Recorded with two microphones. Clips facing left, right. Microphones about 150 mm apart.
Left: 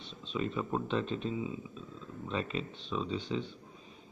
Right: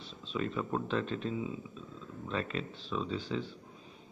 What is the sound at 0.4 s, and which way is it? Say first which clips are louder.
Speech: even; 10° left (ahead or behind).